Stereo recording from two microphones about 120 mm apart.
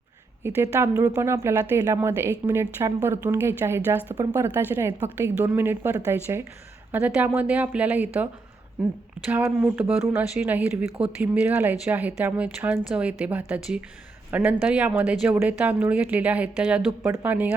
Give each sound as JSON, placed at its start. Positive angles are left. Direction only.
{"t": 0.4, "sound": "a woman's voice", "side_deg": -20}